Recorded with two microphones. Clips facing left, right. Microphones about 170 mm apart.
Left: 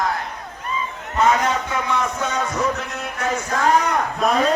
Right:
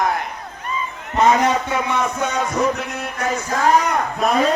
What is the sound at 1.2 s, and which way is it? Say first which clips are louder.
A man's voice: right 3 dB; 15° right (ahead or behind).